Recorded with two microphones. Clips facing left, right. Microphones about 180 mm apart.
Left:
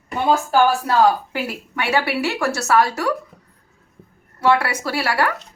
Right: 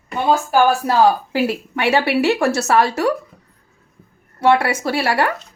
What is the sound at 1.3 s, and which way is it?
Speech, 25° right (ahead or behind).